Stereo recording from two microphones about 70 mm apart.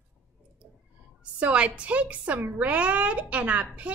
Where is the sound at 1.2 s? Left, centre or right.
Centre.